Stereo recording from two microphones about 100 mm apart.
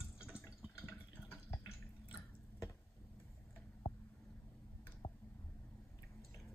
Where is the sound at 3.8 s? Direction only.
40° left (ahead or behind).